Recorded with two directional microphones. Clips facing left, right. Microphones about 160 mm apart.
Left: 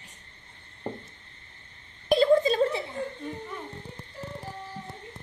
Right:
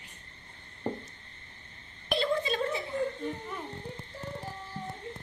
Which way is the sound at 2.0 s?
40° left (ahead or behind).